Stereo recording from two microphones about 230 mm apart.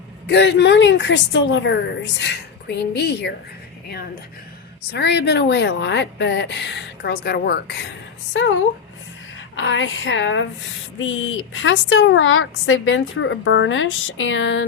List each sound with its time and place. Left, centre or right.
0.3 s a woman's voice: left
4.9 s a woman's voice: left